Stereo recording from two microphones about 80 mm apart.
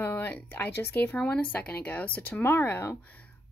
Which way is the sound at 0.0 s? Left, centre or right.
Left.